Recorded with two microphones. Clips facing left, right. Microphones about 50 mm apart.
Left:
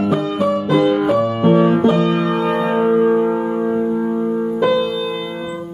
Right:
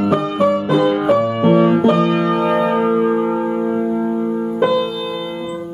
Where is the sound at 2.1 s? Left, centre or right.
Centre.